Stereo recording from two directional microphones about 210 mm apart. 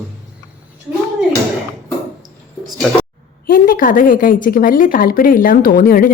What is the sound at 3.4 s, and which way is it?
A woman's voice, 40° left (ahead or behind).